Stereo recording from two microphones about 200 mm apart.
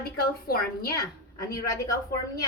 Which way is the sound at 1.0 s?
15° left (ahead or behind).